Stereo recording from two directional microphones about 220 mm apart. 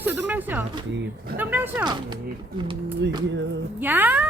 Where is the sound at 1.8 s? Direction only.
20° right (ahead or behind).